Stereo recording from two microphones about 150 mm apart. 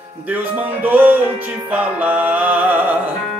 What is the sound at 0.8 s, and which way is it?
Music, 10° right (ahead or behind).